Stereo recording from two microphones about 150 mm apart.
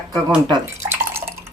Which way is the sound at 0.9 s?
15° right (ahead or behind).